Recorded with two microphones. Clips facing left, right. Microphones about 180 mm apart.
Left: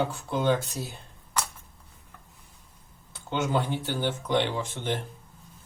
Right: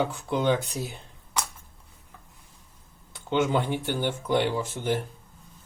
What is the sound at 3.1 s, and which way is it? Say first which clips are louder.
Speech: right 3 dB; 15° right (ahead or behind).